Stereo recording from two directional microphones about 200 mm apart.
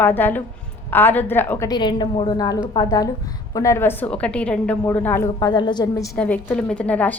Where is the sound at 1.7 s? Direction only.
20° left (ahead or behind); by 7.1 s 5° left (ahead or behind).